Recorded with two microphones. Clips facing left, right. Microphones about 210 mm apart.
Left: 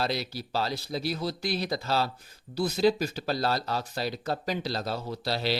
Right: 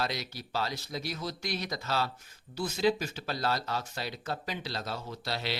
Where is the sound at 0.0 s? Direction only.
30° left (ahead or behind).